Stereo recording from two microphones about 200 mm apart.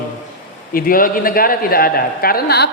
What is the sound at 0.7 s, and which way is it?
A man's voice, 45° left (ahead or behind).